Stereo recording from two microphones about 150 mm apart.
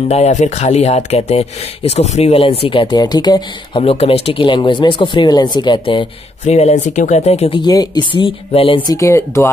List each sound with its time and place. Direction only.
0.1 s speech: 50° left (ahead or behind); by 3.8 s 25° left (ahead or behind)
3.8 s speech: 40° left (ahead or behind)
6.4 s speech: 50° left (ahead or behind)
7.6 s speech: 25° left (ahead or behind)
8.8 s speech: 20° left (ahead or behind)